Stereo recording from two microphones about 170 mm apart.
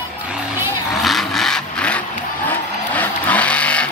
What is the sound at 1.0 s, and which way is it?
Vehicle, centre (ahead or behind).